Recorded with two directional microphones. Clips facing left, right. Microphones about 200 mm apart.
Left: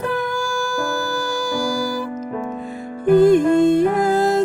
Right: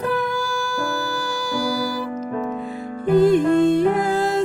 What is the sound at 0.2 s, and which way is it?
Music, 45° left (ahead or behind).